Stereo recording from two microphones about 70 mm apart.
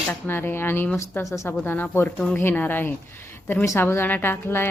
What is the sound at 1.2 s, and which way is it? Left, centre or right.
Speech, left.